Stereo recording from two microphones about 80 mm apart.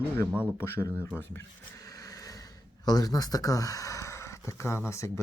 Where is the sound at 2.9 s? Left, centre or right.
Left.